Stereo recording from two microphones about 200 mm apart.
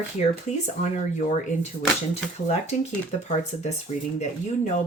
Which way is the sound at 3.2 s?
35° left (ahead or behind).